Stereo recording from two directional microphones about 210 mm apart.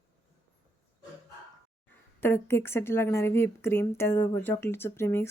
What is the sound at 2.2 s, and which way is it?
Speech, 10° left (ahead or behind).